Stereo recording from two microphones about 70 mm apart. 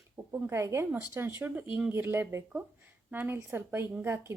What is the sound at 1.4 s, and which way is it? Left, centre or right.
A woman's voice, right.